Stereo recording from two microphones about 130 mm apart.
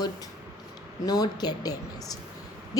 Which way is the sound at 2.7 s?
30° left (ahead or behind).